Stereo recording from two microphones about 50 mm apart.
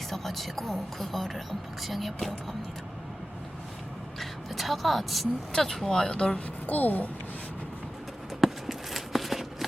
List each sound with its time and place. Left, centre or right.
0.1 s speech: centre
4.2 s a sound: centre
5.5 s speech: centre
5.9 s speech: centre
6.7 s a child's voice: left
8.4 s a sound: centre